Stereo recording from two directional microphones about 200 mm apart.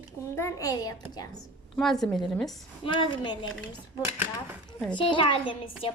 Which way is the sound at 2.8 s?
25° left (ahead or behind).